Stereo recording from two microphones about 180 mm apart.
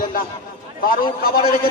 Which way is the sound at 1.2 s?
55° left (ahead or behind).